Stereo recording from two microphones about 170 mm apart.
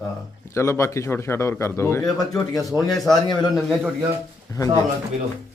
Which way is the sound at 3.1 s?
25° left (ahead or behind).